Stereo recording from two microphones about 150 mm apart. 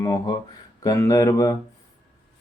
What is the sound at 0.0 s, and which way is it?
Speech, 25° left (ahead or behind).